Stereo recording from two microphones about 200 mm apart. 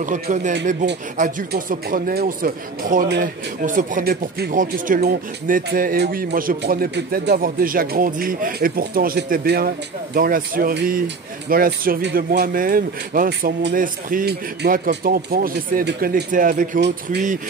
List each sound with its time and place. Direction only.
0.0 s speech: 40° right (ahead or behind)